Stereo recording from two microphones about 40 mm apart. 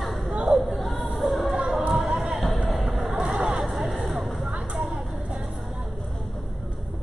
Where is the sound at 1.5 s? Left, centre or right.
Right.